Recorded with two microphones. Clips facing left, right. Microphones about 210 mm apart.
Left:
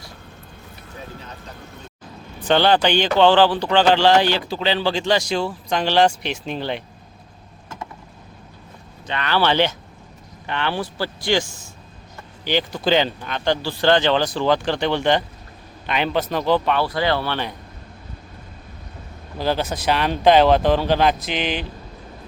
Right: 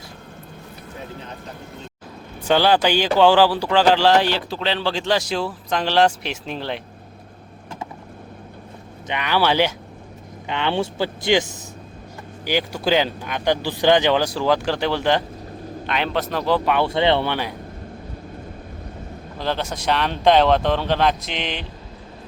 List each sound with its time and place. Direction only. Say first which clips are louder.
2.5 s speech: even; 5° right (ahead or behind)
9.0 s speech: even; 15° right (ahead or behind)
12.5 s speech: left 1 dB; 10° right (ahead or behind)
16.7 s speech: right 3 dB; 25° right (ahead or behind)
19.4 s speech: left 3 dB; 5° left (ahead or behind)